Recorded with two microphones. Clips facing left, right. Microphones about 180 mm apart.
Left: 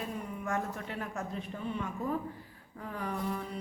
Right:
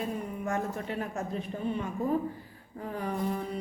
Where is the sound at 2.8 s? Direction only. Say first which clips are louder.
Right 4 dB; 30° right (ahead or behind).